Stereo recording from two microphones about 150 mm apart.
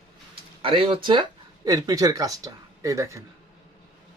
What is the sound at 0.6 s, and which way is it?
Speech, 35° right (ahead or behind).